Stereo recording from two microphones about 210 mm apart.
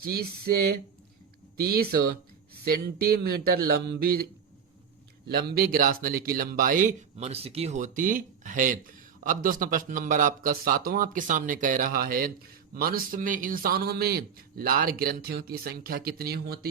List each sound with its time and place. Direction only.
0.0 s speech: 45° right (ahead or behind)
5.3 s speech: 45° right (ahead or behind)